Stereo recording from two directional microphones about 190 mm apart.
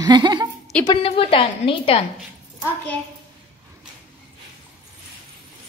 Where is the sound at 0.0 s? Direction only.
20° right (ahead or behind).